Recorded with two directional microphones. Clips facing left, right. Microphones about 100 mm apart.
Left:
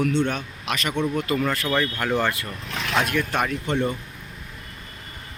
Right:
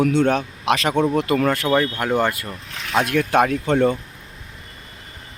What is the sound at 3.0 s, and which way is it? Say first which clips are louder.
Speech: right 5 dB; 60° right (ahead or behind).